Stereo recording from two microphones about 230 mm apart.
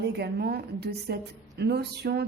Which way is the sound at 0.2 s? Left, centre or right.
Right.